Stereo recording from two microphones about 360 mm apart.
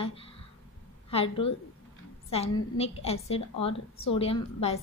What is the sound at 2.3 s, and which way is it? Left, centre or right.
A woman's voice, centre.